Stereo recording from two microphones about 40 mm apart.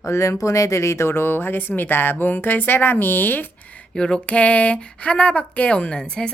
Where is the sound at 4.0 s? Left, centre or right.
Left.